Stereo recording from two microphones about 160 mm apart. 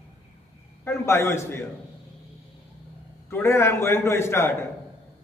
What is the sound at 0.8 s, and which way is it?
Speech, 15° left (ahead or behind).